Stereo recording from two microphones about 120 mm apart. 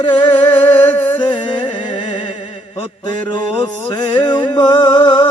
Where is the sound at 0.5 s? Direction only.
15° left (ahead or behind).